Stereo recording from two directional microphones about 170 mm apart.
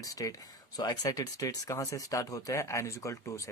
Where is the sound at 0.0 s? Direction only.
20° left (ahead or behind).